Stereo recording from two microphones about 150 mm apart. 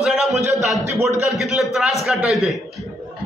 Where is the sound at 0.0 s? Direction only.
Centre (ahead or behind).